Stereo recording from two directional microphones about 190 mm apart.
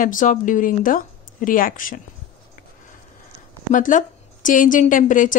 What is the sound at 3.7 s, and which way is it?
A woman's voice, 45° left (ahead or behind).